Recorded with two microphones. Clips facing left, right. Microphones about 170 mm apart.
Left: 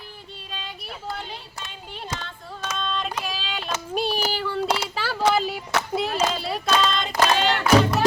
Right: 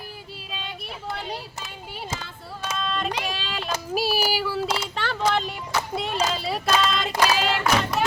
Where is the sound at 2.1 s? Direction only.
10° right (ahead or behind).